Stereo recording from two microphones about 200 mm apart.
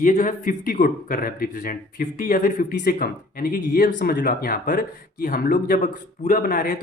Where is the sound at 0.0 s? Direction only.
40° left (ahead or behind).